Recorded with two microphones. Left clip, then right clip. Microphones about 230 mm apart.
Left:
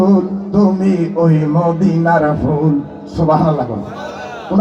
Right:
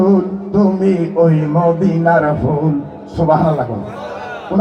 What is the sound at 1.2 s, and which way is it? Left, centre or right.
Speech, left.